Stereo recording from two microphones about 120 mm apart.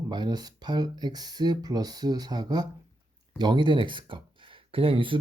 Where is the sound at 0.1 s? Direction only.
35° right (ahead or behind).